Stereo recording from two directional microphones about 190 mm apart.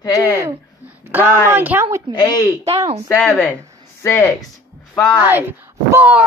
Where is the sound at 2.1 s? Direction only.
20° left (ahead or behind).